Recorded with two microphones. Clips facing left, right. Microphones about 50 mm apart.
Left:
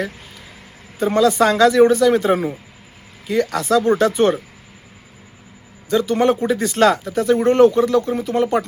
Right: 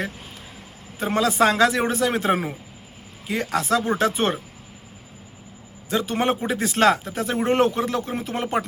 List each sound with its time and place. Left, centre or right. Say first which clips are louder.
0.9 s speech: left 5 dB; right
3.5 s speech: left 4 dB; right
5.9 s speech: left 6 dB; right